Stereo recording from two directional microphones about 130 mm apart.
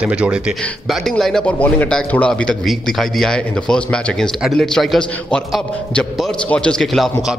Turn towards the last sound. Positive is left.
turn(degrees=5)  # may be behind; listen again after turning